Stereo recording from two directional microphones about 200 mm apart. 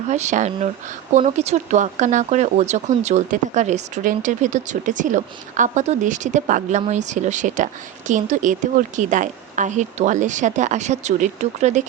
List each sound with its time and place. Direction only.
0.1 s speech: 35° right (ahead or behind)